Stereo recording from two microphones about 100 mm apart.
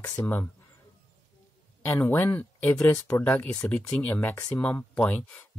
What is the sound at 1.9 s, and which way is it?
Speech, 20° left (ahead or behind).